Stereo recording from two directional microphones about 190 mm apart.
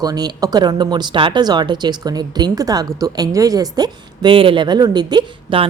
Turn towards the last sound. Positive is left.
turn(degrees=-25)  # may be behind; listen again after turning